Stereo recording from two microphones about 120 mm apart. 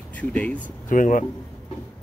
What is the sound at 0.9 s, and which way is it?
Speech, 90° left.